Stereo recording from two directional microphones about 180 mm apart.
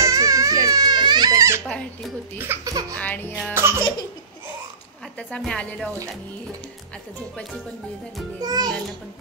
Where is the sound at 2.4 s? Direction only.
15° right (ahead or behind).